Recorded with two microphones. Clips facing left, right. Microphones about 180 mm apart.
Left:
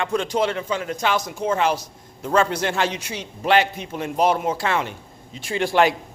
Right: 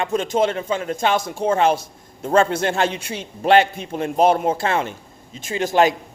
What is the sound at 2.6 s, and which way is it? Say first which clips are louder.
A man's voice: right 3 dB; 50° right (ahead or behind).